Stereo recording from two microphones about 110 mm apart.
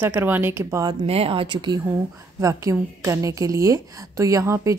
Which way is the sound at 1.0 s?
65° right (ahead or behind).